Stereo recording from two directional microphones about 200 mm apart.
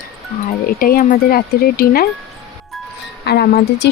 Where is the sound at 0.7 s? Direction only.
45° left (ahead or behind).